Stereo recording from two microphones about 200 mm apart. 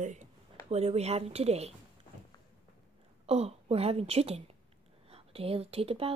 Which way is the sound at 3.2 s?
30° right (ahead or behind).